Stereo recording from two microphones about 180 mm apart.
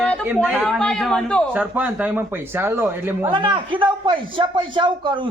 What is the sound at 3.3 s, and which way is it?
Speech, 25° right (ahead or behind).